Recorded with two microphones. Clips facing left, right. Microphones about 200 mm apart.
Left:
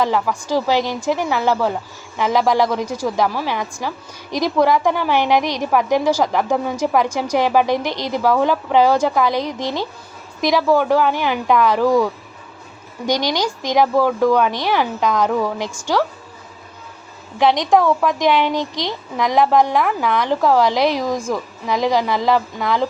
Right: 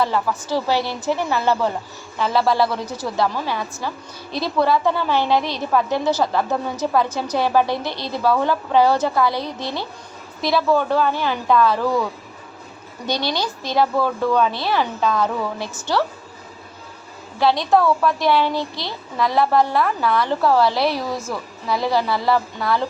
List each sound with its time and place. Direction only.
0.0 s a woman's voice: 15° left (ahead or behind)
13.1 s a woman's voice: 15° left (ahead or behind)
17.3 s a woman's voice: 20° left (ahead or behind)